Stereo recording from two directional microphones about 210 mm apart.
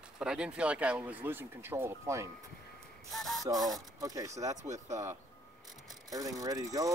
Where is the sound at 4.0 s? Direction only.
15° right (ahead or behind).